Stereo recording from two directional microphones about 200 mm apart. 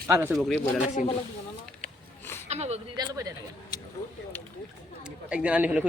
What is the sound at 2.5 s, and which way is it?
Speech, 30° right (ahead or behind).